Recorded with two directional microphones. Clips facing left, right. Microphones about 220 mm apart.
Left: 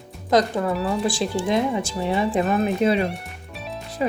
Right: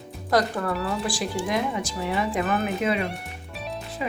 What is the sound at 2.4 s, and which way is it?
Speech, centre (ahead or behind).